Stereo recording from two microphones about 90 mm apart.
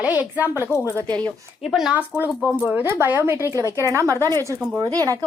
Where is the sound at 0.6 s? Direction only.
30° left (ahead or behind).